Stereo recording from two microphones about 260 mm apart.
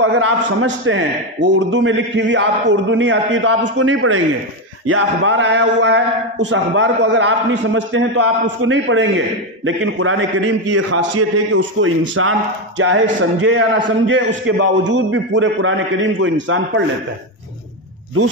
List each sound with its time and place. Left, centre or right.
0.0 s a man's voice: right